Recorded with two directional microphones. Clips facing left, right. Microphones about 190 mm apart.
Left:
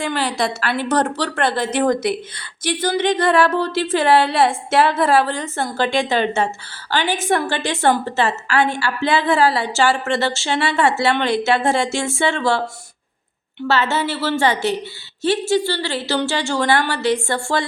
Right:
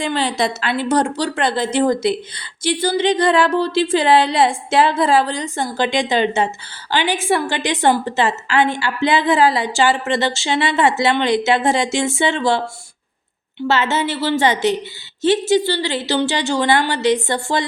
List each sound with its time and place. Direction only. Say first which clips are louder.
0.0 s a woman's voice: right 2 dB; 20° right (ahead or behind)
13.7 s a woman's voice: right 1 dB; 20° right (ahead or behind)